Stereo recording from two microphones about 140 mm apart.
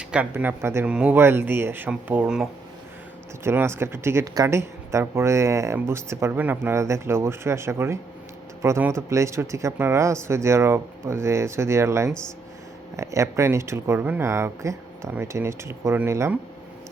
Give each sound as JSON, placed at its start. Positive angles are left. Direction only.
{"t": 0.0, "sound": "speech", "side_deg": -10}
{"t": 3.4, "sound": "speech", "side_deg": -15}